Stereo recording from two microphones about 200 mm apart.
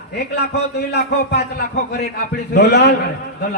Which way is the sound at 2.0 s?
50° left (ahead or behind).